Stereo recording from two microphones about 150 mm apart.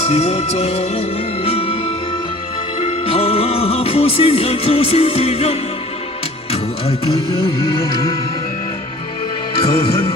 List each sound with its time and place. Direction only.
0.0 s music: 45° left (ahead or behind)
2.8 s music: 40° left (ahead or behind)